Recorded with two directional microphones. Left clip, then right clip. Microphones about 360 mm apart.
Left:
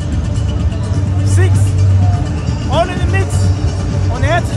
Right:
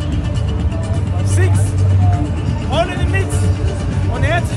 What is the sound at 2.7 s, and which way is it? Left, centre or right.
Music, centre.